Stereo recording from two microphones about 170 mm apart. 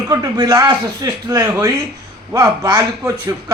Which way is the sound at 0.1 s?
20° right (ahead or behind).